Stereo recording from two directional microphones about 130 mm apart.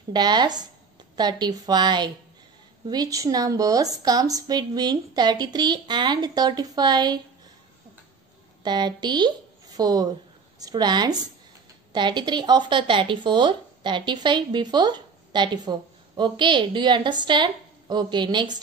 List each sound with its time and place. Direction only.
0.1 s speech: 35° right (ahead or behind)
8.6 s a woman's voice: 35° right (ahead or behind)